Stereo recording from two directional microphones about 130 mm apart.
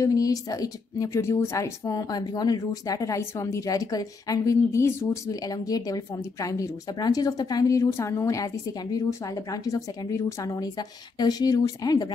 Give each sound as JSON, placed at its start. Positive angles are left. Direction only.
{"t": 0.0, "sound": "a woman's voice", "side_deg": 25}